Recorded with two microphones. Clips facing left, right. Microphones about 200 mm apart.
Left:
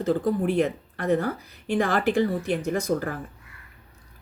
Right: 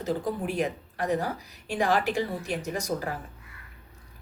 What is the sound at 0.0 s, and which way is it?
Speech, 55° left (ahead or behind).